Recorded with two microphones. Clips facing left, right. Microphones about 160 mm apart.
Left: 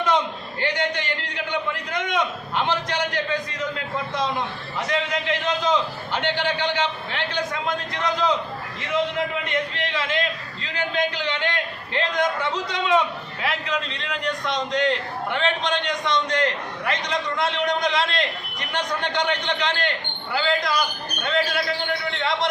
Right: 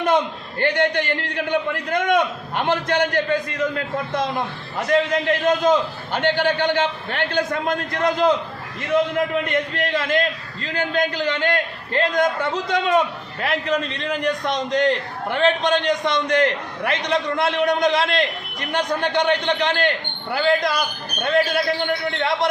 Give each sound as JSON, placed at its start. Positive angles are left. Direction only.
{"t": 0.6, "sound": "a man's voice", "side_deg": -55}